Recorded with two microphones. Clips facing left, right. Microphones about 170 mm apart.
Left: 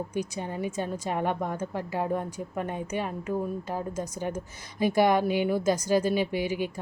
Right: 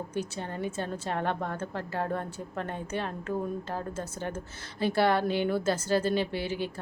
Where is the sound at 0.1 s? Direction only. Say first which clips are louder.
Left 2 dB; 10° left (ahead or behind).